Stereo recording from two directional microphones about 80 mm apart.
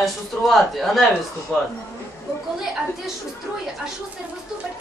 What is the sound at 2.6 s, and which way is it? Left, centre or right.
Speech, centre.